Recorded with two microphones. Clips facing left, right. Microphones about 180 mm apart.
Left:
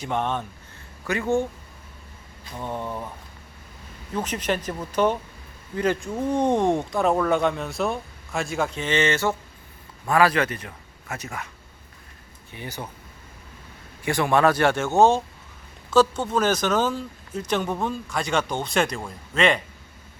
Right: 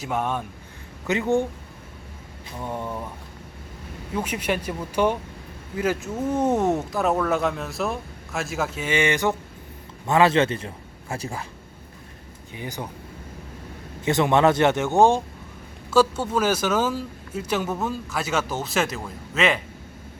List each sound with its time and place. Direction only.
0.0 s speech: 5° right (ahead or behind)
1.0 s speech: 20° right (ahead or behind)
2.6 s speech: 10° right (ahead or behind)
4.1 s speech: 10° right (ahead or behind); by 11.4 s 30° right (ahead or behind)
12.5 s speech: 15° right (ahead or behind)
14.0 s speech: 20° right (ahead or behind); by 19.5 s 5° right (ahead or behind)